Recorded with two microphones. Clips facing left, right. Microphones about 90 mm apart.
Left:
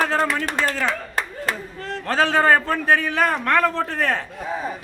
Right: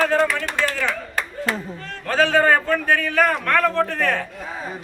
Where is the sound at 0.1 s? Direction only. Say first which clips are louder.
Right 2 dB; 35° left (ahead or behind).